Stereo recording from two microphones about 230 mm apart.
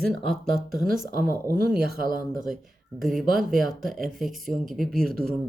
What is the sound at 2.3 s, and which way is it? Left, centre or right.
Speech, centre.